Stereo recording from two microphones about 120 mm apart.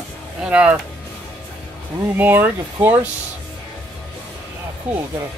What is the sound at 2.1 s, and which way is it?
Speech, 15° right (ahead or behind).